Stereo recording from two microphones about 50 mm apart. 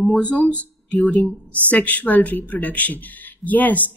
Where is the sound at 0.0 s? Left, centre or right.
Left.